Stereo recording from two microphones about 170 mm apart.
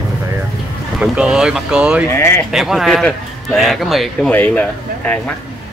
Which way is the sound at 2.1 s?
15° left (ahead or behind).